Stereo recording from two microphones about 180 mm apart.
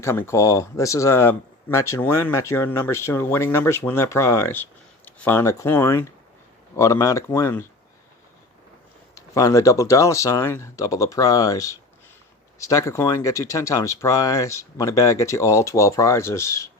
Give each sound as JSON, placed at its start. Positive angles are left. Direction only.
{"t": 0.0, "sound": "speech", "side_deg": 15}
{"t": 9.1, "sound": "speech", "side_deg": 15}